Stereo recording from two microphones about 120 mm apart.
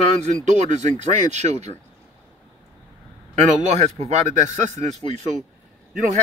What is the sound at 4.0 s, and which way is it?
Speech, 80° right.